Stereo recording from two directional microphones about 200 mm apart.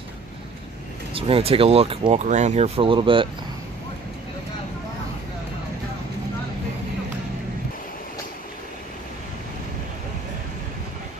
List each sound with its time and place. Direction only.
1.1 s speech: 30° right (ahead or behind)